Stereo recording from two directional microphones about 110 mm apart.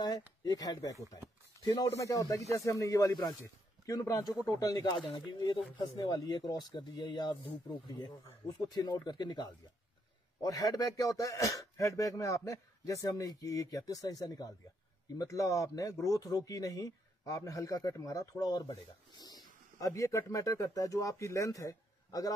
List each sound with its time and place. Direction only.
0.0 s speech: 40° left (ahead or behind)